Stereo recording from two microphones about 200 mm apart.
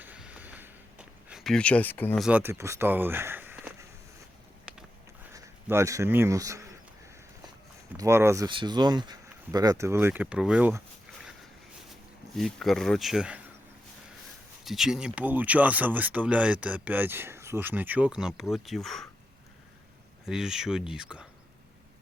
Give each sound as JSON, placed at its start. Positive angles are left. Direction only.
{"t": 0.0, "sound": "a sound", "side_deg": -5}
{"t": 2.2, "sound": "speech", "side_deg": -10}
{"t": 4.7, "sound": "a sound", "side_deg": -5}
{"t": 5.3, "sound": "speech", "side_deg": -15}
{"t": 7.9, "sound": "speech", "side_deg": -15}
{"t": 12.4, "sound": "speech", "side_deg": 0}
{"t": 14.6, "sound": "speech", "side_deg": 0}
{"t": 20.2, "sound": "speech", "side_deg": -5}